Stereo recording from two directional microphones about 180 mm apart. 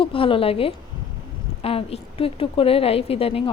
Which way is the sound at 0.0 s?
30° left (ahead or behind).